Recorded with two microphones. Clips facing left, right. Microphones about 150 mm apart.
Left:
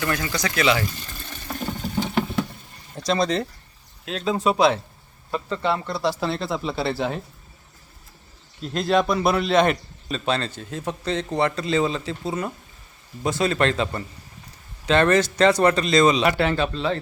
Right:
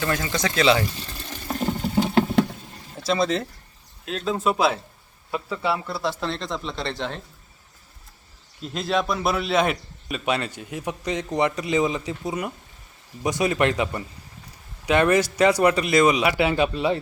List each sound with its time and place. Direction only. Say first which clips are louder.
0.0 s speech: right 1 dB; 25° right (ahead or behind)
0.9 s water: right 2 dB; 30° right (ahead or behind)
3.0 s speech: left 1 dB; 5° right (ahead or behind)
8.6 s a man's voice: left 4 dB; centre (ahead or behind)